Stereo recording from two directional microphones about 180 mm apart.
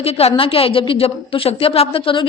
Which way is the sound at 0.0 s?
35° left (ahead or behind).